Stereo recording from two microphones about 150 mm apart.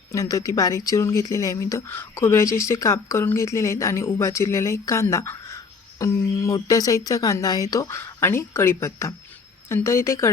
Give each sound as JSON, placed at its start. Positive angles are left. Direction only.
{"t": 0.1, "sound": "speech", "side_deg": 25}